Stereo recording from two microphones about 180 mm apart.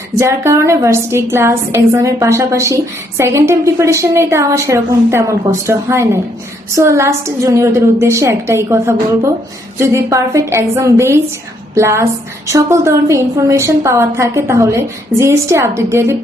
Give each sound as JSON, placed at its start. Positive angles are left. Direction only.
{"t": 0.2, "sound": "a woman's voice", "side_deg": -15}